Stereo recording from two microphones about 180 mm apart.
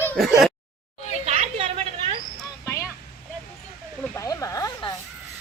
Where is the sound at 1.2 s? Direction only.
35° right (ahead or behind).